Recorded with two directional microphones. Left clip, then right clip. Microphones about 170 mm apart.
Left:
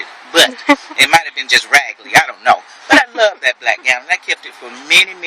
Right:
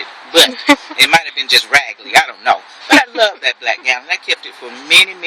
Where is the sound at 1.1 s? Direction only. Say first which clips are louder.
Even; 20° left (ahead or behind).